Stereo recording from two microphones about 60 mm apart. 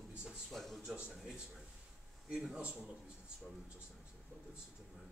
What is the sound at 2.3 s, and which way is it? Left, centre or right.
Speech, centre.